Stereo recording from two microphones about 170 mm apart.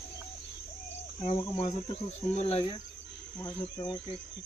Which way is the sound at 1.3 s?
35° left (ahead or behind).